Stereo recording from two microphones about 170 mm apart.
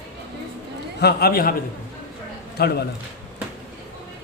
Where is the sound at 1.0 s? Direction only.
70° left (ahead or behind).